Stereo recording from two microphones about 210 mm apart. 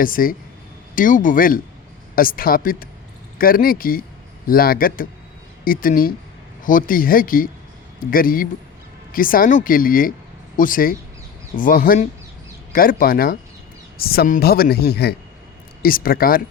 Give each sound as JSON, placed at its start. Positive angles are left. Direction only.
{"t": 0.0, "sound": "speech", "side_deg": 40}